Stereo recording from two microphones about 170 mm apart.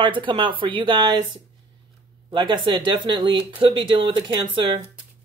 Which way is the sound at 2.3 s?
25° right (ahead or behind).